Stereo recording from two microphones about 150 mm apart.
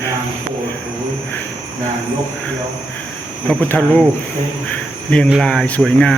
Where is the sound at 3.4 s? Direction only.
10° left (ahead or behind).